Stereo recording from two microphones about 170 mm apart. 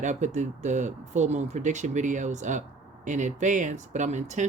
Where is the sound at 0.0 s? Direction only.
45° right (ahead or behind).